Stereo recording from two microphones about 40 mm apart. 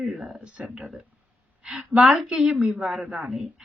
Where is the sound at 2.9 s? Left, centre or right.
Centre.